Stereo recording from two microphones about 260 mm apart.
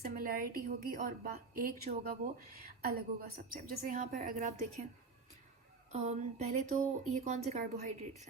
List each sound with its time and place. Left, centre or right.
0.0 s a woman's voice: right
5.9 s a woman's voice: right